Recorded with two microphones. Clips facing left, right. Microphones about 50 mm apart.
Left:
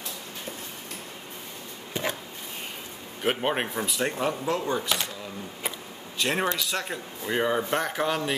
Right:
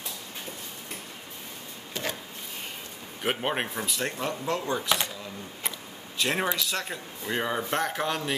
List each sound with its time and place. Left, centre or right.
2.0 s a sound: centre
3.2 s speech: centre
6.1 s speech: centre